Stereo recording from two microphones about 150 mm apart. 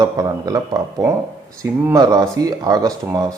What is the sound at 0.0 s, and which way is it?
Speech, 25° right (ahead or behind).